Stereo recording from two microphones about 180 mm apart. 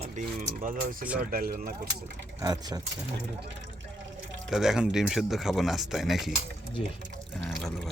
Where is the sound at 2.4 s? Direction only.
20° right (ahead or behind).